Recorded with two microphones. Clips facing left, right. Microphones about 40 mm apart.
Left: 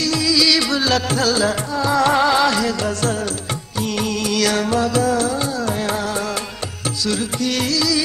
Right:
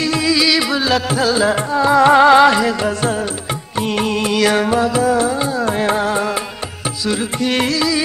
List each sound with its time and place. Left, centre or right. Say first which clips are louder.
0.0 s music: right 2 dB; right
0.5 s music: right 2 dB; centre